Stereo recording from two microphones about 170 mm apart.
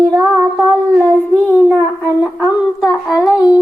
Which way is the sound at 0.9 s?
15° right (ahead or behind).